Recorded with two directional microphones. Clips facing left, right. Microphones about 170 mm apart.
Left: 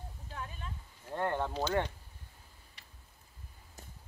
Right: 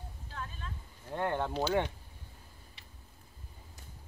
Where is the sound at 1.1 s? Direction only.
5° right (ahead or behind).